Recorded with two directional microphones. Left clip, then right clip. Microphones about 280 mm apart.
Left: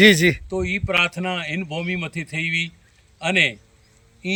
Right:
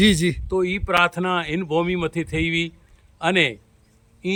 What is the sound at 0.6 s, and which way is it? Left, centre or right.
Speech, right.